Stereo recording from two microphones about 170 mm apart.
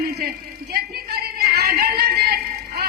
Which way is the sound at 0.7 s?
65° right (ahead or behind).